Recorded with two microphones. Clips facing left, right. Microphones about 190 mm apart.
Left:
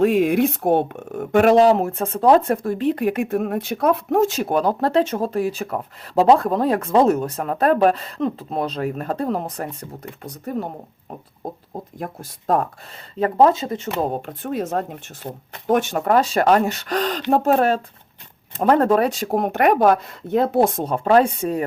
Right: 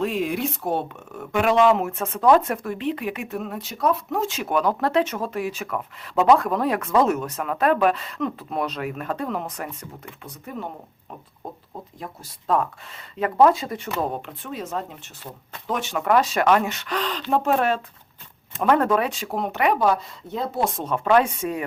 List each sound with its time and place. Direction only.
0.0 s speech: 55° left (ahead or behind); by 11.8 s 35° left (ahead or behind)
11.9 s speech: 50° left (ahead or behind)
13.1 s speech: 30° left (ahead or behind)
14.2 s speech: 45° left (ahead or behind); by 20.6 s 65° left (ahead or behind)
20.6 s speech: 45° left (ahead or behind)